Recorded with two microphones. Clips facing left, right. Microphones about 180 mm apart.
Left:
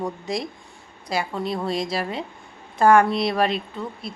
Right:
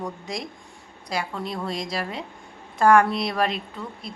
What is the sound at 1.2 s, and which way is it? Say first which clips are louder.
Speech: left 4 dB; 25° left (ahead or behind).